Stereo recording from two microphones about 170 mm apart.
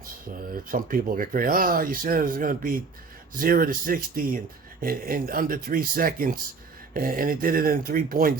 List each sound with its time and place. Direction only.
0.7 s speech: 55° right (ahead or behind)